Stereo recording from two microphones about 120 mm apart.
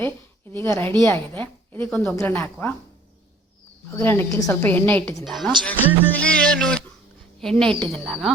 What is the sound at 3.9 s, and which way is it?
Speech, 20° left (ahead or behind).